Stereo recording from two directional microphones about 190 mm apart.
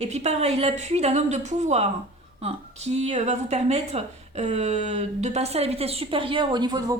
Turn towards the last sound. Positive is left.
turn(degrees=-20)  # may be behind; listen again after turning